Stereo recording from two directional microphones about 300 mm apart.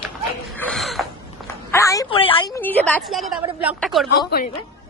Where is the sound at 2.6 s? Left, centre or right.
Centre.